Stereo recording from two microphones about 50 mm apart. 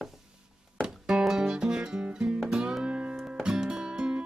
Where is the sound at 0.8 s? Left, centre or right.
Centre.